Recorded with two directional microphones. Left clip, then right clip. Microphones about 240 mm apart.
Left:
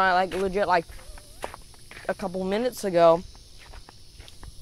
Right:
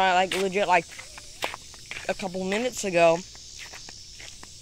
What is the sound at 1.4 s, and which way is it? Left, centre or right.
Walk, right.